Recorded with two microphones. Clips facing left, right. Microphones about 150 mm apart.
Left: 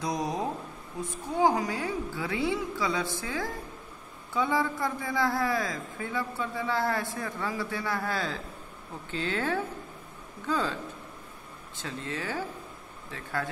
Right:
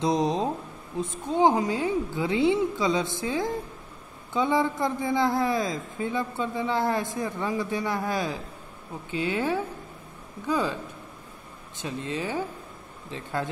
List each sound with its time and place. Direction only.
0.0 s a man's voice: 25° right (ahead or behind)
11.8 s a man's voice: 20° right (ahead or behind)